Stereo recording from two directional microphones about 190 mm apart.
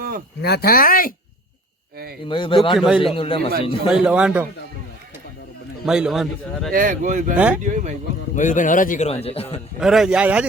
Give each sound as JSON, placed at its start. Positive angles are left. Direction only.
{"t": 0.4, "sound": "speech", "side_deg": 55}
{"t": 2.2, "sound": "speech", "side_deg": 25}
{"t": 2.7, "sound": "a man's voice", "side_deg": 0}
{"t": 3.0, "sound": "speech", "side_deg": 30}
{"t": 3.8, "sound": "a man's voice", "side_deg": -5}
{"t": 5.8, "sound": "a man's voice", "side_deg": -5}
{"t": 6.7, "sound": "speech", "side_deg": -45}
{"t": 7.3, "sound": "speech", "side_deg": -5}
{"t": 7.6, "sound": "speech", "side_deg": -40}
{"t": 8.4, "sound": "speech", "side_deg": 40}
{"t": 9.2, "sound": "a man's voice", "side_deg": 30}
{"t": 9.8, "sound": "a man's voice", "side_deg": 0}